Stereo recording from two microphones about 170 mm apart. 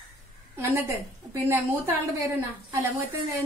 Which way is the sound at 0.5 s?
15° right (ahead or behind).